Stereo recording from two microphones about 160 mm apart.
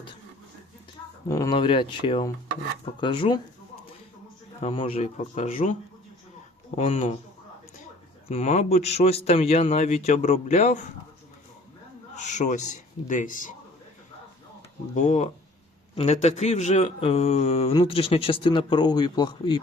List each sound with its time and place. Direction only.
1.3 s speech: 20° left (ahead or behind)
1.5 s speech: 35° left (ahead or behind)
4.7 s a man's voice: 35° left (ahead or behind); by 5.7 s 50° left (ahead or behind)
6.7 s a man's voice: 45° left (ahead or behind)
8.3 s a man's voice: 45° left (ahead or behind)
12.1 s a man's voice: 50° left (ahead or behind)
14.9 s a man's voice: 50° left (ahead or behind); by 19.5 s 30° left (ahead or behind)